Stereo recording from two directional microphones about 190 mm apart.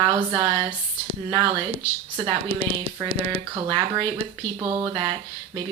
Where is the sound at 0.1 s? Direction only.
25° right (ahead or behind).